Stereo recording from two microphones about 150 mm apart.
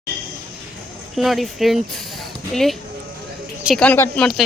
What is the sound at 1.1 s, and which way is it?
Speech, centre (ahead or behind).